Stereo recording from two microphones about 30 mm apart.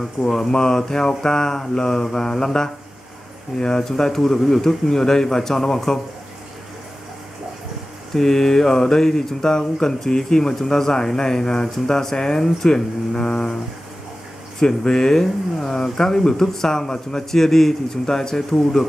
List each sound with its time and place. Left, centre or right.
0.3 s speech: left
3.8 s speech: centre
4.8 s speech: centre
8.1 s speech: centre
14.6 s speech: centre
17.3 s speech: centre